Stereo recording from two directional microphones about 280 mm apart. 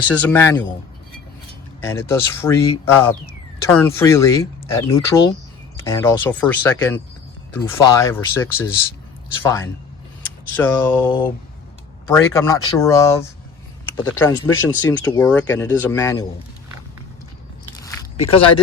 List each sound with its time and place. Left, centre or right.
0.1 s speech: centre
1.8 s speech: centre
14.4 s speech: left
14.8 s speech: centre
17.8 s biting: centre